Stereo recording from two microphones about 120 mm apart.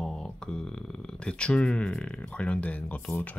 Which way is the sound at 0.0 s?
5° left (ahead or behind).